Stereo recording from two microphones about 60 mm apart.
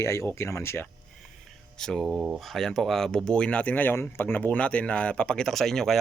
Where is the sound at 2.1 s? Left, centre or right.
Right.